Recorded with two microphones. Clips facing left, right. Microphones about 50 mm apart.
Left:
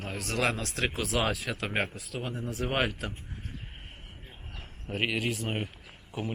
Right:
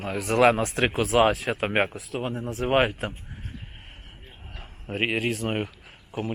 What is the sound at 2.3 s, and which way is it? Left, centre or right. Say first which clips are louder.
Speech: right 4 dB; centre.